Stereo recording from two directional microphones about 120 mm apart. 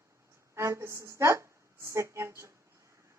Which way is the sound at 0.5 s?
25° right (ahead or behind).